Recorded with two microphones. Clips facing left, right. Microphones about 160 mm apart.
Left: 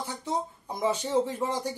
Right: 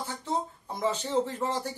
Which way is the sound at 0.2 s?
10° left (ahead or behind).